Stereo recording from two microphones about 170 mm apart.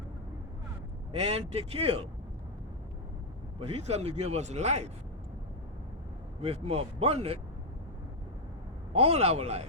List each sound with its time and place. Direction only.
1.1 s speech: 40° right (ahead or behind)
3.6 s speech: 35° right (ahead or behind)
6.4 s speech: 35° right (ahead or behind)
8.9 s speech: 35° right (ahead or behind)